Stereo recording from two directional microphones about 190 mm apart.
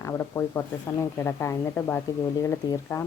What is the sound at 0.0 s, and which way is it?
A woman's voice, 15° left (ahead or behind).